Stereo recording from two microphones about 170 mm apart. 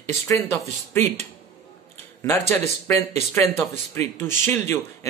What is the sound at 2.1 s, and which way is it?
Speech, 15° left (ahead or behind).